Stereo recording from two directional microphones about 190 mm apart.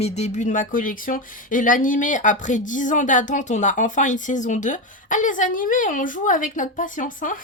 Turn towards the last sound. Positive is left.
turn(degrees=45)  # may be behind; listen again after turning